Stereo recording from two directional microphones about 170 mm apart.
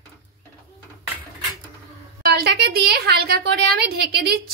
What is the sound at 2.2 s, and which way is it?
A woman's voice, 70° right (ahead or behind).